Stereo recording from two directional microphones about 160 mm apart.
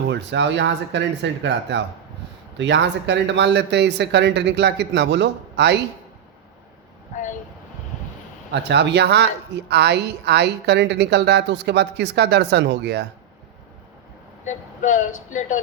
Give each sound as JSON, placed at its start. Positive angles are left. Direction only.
{"t": 0.1, "sound": "a woman's voice", "side_deg": -90}
{"t": 8.7, "sound": "a woman's voice", "side_deg": -90}
{"t": 14.4, "sound": "speech", "side_deg": 50}